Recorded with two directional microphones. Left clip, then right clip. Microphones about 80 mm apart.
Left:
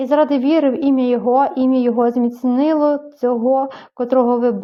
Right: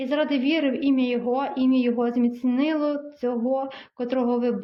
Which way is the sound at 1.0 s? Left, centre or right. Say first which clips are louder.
Left 10 dB; left.